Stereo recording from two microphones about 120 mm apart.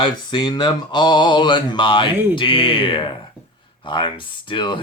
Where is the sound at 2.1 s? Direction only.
15° right (ahead or behind).